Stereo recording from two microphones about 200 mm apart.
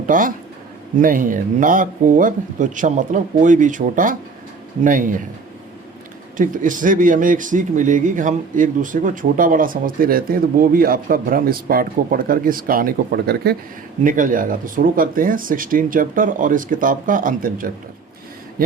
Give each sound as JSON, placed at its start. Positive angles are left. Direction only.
{"t": 0.0, "sound": "a man's voice", "side_deg": -40}
{"t": 6.3, "sound": "speech", "side_deg": -40}
{"t": 14.0, "sound": "speech", "side_deg": -40}